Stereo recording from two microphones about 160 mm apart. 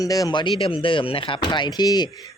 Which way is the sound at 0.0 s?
20° left (ahead or behind).